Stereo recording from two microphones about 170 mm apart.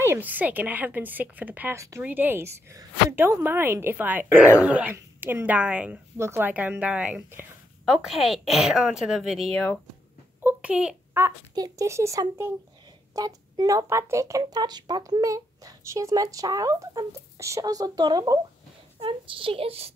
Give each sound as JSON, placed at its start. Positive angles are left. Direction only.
{"t": 0.0, "sound": "a woman's voice", "side_deg": -10}
{"t": 10.4, "sound": "a child's voice", "side_deg": -5}
{"t": 11.5, "sound": "a woman's voice", "side_deg": -20}